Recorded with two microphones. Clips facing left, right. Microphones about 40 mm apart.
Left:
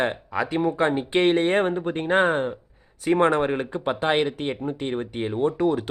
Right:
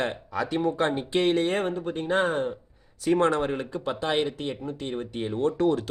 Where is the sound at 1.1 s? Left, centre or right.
Left; by 5.8 s centre.